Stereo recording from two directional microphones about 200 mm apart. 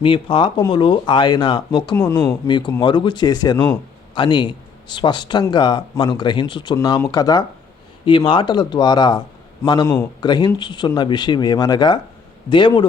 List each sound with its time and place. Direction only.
0.0 s a man's voice: 25° left (ahead or behind)